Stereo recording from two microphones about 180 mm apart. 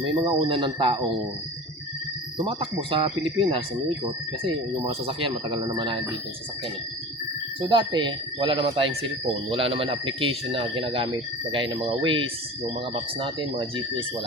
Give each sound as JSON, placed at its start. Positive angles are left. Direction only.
{"t": 0.2, "sound": "speech", "side_deg": -30}
{"t": 2.4, "sound": "speech", "side_deg": -30}
{"t": 7.6, "sound": "speech", "side_deg": -25}